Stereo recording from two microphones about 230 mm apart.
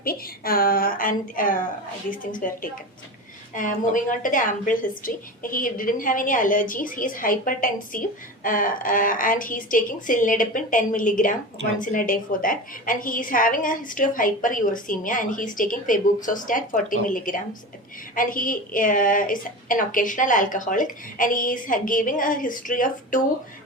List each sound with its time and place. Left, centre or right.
0.0 s a woman's voice: left